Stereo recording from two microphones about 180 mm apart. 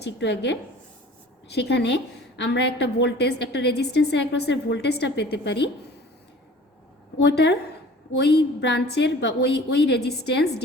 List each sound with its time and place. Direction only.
0.0 s a woman's voice: 75° left (ahead or behind)
1.5 s a woman's voice: 70° left (ahead or behind)
7.2 s a woman's voice: 70° left (ahead or behind)